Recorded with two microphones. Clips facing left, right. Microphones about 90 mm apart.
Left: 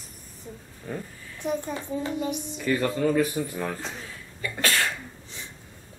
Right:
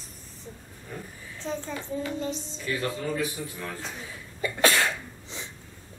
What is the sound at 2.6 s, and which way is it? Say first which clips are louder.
Speech: left 7 dB; 55° left (ahead or behind).